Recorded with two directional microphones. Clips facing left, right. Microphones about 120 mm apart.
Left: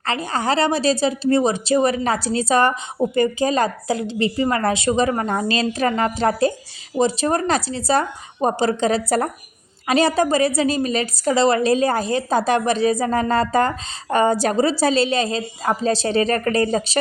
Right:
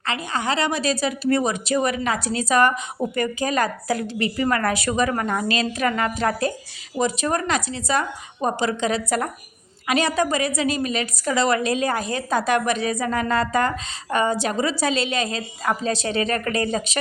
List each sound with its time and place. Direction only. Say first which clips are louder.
0.0 s a woman's voice: left 3 dB; 35° left (ahead or behind)